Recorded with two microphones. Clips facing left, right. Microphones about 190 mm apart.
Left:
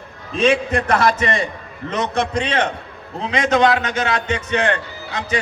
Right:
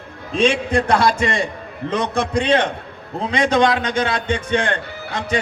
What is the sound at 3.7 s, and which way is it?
Speech, 30° right (ahead or behind).